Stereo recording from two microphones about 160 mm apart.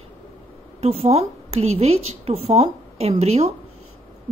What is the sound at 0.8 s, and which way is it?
Speech, 40° right (ahead or behind).